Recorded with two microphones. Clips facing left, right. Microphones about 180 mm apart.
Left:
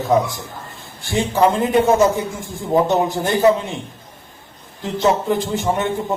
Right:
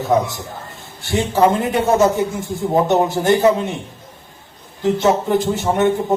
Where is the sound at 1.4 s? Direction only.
20° right (ahead or behind).